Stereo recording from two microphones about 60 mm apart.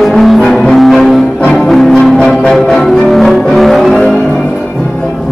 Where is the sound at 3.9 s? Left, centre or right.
Centre.